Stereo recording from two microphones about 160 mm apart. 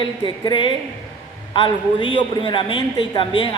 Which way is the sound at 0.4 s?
30° left (ahead or behind).